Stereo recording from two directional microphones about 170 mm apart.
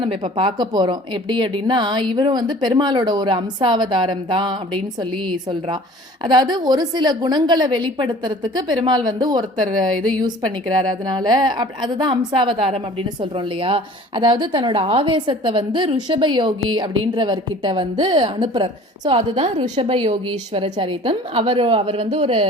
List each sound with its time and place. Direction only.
0.0 s a woman's voice: 30° right (ahead or behind)